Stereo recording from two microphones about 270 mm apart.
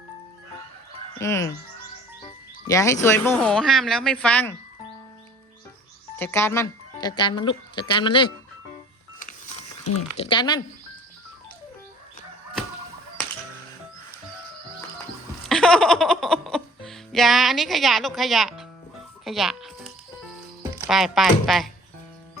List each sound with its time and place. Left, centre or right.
1.2 s speech: centre
2.6 s speech: centre
6.1 s speech: centre
9.8 s speech: left
10.2 s speech: centre
15.4 s speech: centre
19.2 s music: centre
20.6 s speech: centre